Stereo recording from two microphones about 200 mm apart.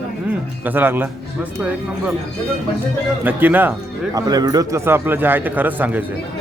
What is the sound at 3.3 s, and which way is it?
Speech, 10° right (ahead or behind).